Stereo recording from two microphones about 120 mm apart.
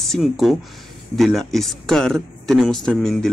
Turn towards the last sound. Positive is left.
turn(degrees=5)  # may be behind; listen again after turning